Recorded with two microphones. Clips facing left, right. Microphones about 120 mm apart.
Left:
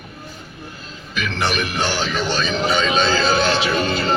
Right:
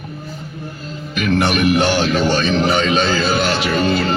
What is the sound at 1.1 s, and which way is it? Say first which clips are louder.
Speech: right 6 dB; 55° right (ahead or behind).